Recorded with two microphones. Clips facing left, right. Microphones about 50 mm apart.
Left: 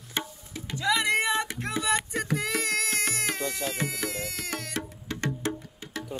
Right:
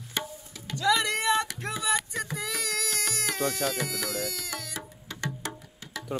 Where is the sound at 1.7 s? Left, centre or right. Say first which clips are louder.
Left 2 dB; left.